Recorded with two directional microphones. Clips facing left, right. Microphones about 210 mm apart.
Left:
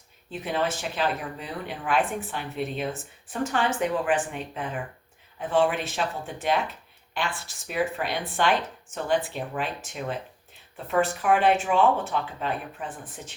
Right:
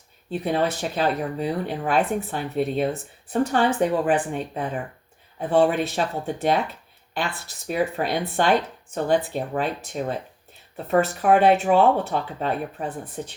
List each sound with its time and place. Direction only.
0.3 s speech: 40° right (ahead or behind)